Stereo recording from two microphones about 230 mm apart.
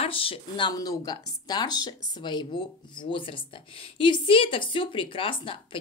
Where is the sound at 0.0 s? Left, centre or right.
Left.